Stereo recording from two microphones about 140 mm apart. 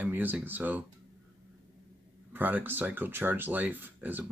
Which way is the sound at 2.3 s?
15° right (ahead or behind).